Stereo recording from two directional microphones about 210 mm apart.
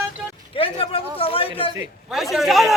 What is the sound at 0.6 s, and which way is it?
A man's voice, 25° left (ahead or behind).